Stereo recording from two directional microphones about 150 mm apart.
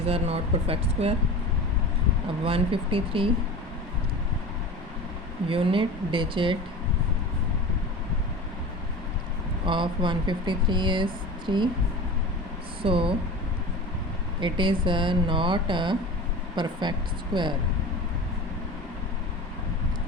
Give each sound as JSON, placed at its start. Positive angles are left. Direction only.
{"t": 0.0, "sound": "speech", "side_deg": -40}
{"t": 2.4, "sound": "speech", "side_deg": -35}
{"t": 5.5, "sound": "speech", "side_deg": -35}
{"t": 9.6, "sound": "speech", "side_deg": -35}
{"t": 12.8, "sound": "speech", "side_deg": -35}
{"t": 14.4, "sound": "speech", "side_deg": -35}